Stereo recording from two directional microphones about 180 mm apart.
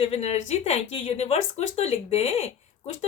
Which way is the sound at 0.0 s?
35° left (ahead or behind).